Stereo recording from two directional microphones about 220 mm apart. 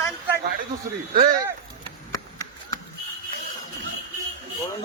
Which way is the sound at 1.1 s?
40° right (ahead or behind).